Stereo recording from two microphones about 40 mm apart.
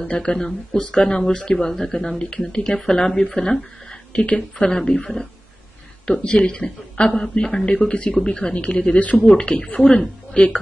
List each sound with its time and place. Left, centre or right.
0.2 s speech: left
4.1 s a woman's voice: left
4.6 s speech: centre
6.0 s speech: left